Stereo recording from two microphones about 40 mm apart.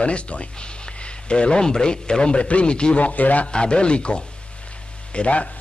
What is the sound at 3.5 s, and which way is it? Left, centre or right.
A man's voice, left.